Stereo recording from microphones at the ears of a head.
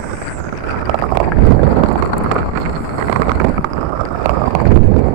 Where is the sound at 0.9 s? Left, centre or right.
Right.